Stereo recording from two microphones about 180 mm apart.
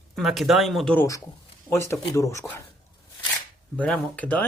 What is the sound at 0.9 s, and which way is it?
Speech, 15° left (ahead or behind).